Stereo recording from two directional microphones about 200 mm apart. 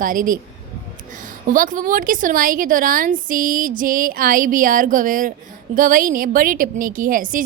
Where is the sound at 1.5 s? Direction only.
40° right (ahead or behind).